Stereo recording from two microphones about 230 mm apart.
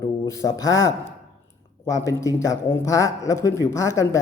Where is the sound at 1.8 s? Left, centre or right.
Centre.